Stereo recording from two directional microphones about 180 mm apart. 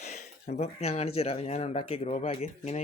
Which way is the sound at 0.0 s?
40° left (ahead or behind).